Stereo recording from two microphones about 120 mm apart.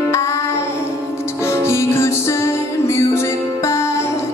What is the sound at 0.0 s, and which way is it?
Music, 25° left (ahead or behind).